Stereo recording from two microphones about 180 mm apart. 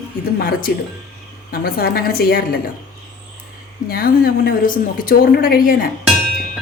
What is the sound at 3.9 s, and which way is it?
A woman's voice, 55° left (ahead or behind).